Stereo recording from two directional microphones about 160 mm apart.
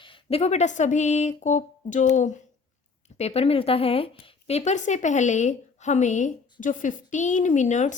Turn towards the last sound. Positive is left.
turn(degrees=50)  # may be behind; listen again after turning